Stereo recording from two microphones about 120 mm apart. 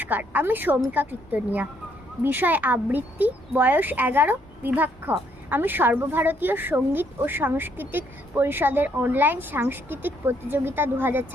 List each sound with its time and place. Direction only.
0.0 s speech: 15° right (ahead or behind)